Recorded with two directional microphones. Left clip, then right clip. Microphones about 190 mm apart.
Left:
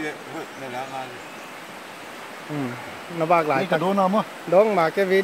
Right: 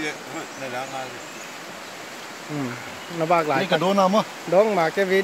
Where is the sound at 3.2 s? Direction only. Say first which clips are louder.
Left 1 dB; 10° left (ahead or behind).